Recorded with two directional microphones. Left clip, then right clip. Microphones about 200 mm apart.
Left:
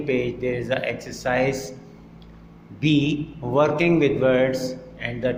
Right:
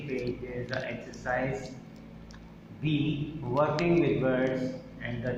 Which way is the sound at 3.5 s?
30° left (ahead or behind).